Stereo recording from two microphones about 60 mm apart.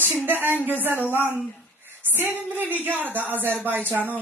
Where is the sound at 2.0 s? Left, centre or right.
Right.